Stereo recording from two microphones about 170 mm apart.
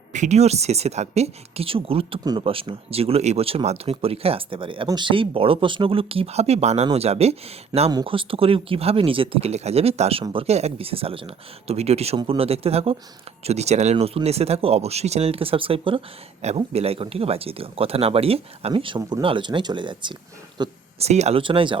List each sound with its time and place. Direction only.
0.1 s speech: 45° right (ahead or behind)
7.9 s speech: 25° right (ahead or behind)
21.0 s speech: 40° right (ahead or behind)